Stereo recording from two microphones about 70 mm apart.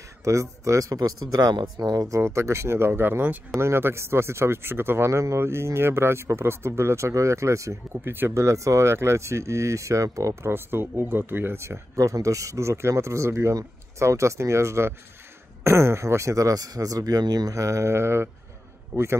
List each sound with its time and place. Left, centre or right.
0.2 s speech: right
0.9 s speech: right
8.4 s speech: right
10.5 s speech: right
12.0 s speech: right
17.6 s speech: right